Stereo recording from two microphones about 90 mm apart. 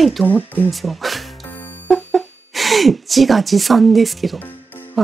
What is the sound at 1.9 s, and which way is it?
Speech, centre (ahead or behind).